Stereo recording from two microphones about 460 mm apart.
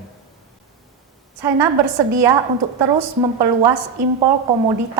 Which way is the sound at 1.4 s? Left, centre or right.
Right.